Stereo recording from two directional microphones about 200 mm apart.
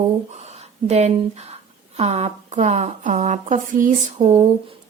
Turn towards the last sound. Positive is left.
turn(degrees=-30)  # may be behind; listen again after turning